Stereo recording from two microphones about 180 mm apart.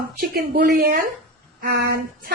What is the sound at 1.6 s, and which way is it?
Speech, 70° right (ahead or behind).